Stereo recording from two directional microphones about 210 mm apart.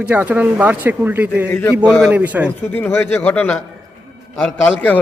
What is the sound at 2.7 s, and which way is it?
A man's voice, 10° left (ahead or behind).